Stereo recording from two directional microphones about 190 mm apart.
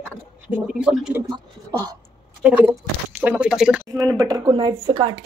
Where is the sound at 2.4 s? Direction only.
5° right (ahead or behind).